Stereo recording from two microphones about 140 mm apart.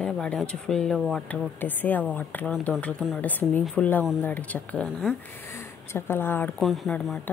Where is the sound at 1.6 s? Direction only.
10° left (ahead or behind).